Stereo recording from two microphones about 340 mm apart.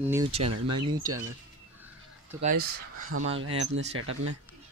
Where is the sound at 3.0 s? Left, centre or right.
Right.